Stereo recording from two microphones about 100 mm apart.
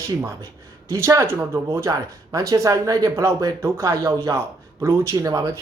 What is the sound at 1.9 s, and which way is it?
A woman's voice, 35° right (ahead or behind).